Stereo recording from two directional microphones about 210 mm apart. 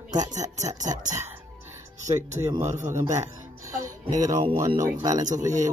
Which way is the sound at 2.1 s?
15° right (ahead or behind).